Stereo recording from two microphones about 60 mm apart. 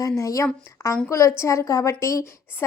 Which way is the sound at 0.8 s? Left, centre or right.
Left.